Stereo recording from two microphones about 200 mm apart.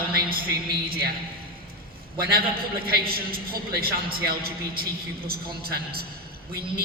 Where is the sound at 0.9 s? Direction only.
50° right (ahead or behind).